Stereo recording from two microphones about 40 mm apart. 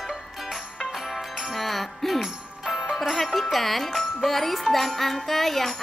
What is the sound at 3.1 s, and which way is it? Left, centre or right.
Speech, centre.